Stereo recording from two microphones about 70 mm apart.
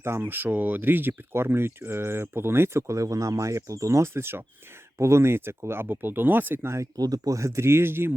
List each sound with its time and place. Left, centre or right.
0.0 s speech: right
6.9 s speech: right